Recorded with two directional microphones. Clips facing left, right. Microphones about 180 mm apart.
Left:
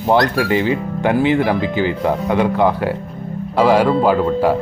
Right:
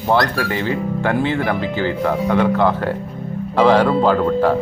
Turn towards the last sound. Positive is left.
turn(degrees=10)  # may be behind; listen again after turning